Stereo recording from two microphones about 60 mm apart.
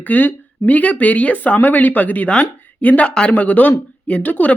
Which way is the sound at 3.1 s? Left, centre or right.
Centre.